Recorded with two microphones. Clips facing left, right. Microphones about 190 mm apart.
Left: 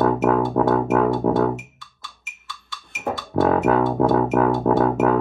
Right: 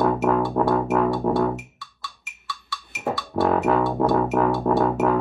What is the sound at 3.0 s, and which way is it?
Music, centre (ahead or behind).